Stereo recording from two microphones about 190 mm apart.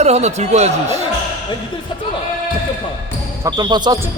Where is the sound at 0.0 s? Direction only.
35° right (ahead or behind).